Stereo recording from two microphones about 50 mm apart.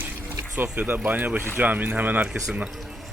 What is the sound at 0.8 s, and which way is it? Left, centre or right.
Speech, right.